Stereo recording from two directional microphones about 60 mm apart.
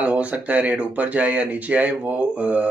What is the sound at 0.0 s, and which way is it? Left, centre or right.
Speech, right.